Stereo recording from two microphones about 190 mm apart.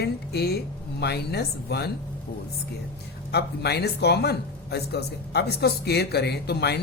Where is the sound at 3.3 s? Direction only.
60° left (ahead or behind).